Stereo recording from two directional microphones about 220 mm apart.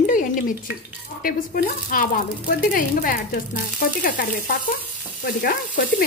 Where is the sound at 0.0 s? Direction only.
35° left (ahead or behind).